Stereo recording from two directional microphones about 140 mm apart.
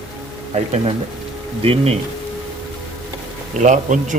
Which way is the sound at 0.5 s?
50° right (ahead or behind).